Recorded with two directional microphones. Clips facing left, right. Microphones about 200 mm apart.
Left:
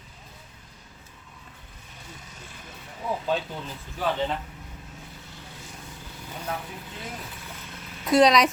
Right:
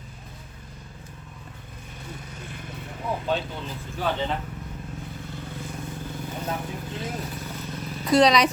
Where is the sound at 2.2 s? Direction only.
60° right (ahead or behind).